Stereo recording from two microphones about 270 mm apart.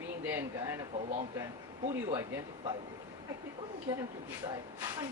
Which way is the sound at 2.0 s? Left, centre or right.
Centre.